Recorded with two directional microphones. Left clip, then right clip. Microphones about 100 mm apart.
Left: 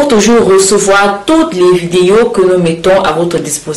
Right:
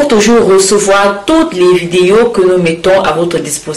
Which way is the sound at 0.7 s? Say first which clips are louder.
Even; 10° left (ahead or behind).